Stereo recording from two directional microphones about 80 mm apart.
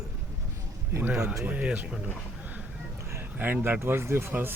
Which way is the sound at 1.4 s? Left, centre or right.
Centre.